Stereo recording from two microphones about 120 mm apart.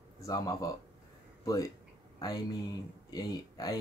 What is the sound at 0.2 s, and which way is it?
Speech, 30° left (ahead or behind).